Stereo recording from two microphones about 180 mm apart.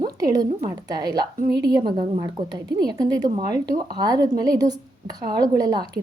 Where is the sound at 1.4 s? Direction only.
60° right (ahead or behind).